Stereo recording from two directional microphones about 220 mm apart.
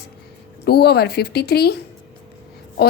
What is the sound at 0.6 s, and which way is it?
A woman's voice, 45° left (ahead or behind).